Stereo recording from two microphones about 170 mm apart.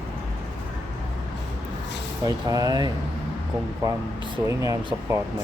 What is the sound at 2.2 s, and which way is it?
Speech, 20° right (ahead or behind).